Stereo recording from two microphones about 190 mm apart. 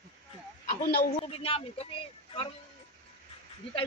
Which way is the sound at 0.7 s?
50° left (ahead or behind).